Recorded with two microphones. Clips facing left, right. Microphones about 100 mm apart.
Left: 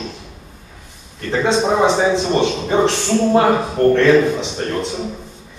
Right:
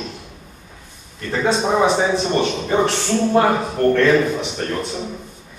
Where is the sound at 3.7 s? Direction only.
20° left (ahead or behind).